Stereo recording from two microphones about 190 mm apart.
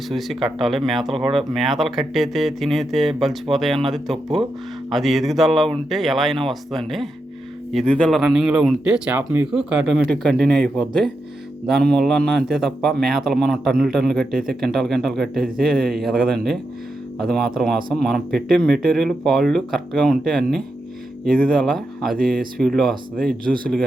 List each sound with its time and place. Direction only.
0.1 s a man's voice: centre (ahead or behind)
21.6 s a man's voice: centre (ahead or behind)